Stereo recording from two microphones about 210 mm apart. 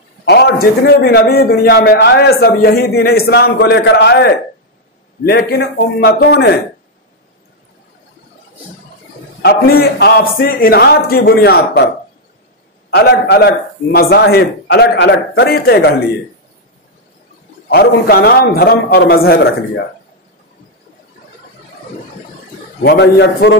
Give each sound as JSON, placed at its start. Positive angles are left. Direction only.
{"t": 0.2, "sound": "a man's voice", "side_deg": 50}
{"t": 9.4, "sound": "a man's voice", "side_deg": 50}
{"t": 12.9, "sound": "a man's voice", "side_deg": 50}
{"t": 17.6, "sound": "a man's voice", "side_deg": 50}
{"t": 22.8, "sound": "a man's voice", "side_deg": 50}